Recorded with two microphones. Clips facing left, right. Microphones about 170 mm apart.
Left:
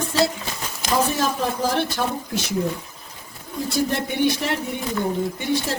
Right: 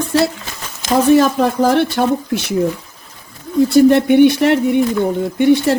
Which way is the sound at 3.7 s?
65° right (ahead or behind).